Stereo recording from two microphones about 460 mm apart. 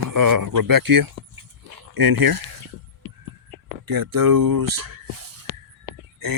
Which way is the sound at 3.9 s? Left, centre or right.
Right.